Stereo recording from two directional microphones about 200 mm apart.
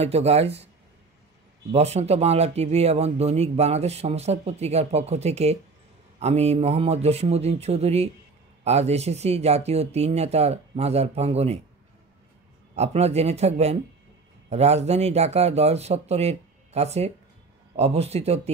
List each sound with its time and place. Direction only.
0.0 s speech: 30° right (ahead or behind)
1.7 s speech: 35° right (ahead or behind)
12.7 s speech: 30° right (ahead or behind)